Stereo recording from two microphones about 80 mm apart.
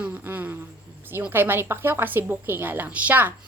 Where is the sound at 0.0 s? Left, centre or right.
Centre.